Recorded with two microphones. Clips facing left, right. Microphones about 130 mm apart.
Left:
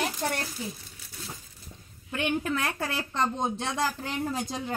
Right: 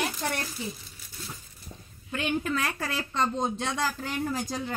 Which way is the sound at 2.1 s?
20° left (ahead or behind).